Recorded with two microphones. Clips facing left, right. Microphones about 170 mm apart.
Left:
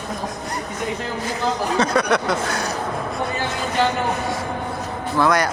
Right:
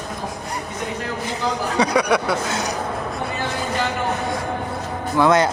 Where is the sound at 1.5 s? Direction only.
15° right (ahead or behind).